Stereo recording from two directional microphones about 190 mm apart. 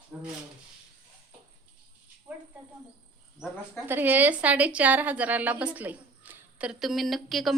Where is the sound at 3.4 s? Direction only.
5° right (ahead or behind).